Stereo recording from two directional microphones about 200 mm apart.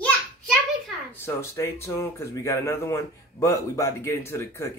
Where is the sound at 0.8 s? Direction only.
10° left (ahead or behind).